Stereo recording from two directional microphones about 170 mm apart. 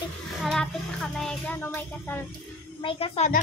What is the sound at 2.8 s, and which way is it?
Speech, 35° left (ahead or behind).